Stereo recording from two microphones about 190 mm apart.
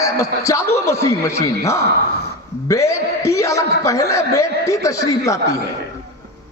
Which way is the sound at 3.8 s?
15° left (ahead or behind).